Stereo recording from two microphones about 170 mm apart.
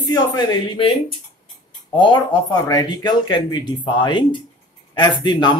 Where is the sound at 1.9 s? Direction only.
25° left (ahead or behind).